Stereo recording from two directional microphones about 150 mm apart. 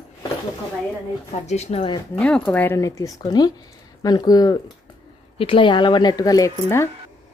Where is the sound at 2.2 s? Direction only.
5° left (ahead or behind); by 4.6 s 25° left (ahead or behind).